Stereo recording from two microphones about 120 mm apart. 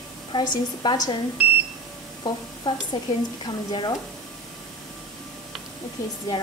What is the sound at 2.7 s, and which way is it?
A woman's voice, 40° left (ahead or behind).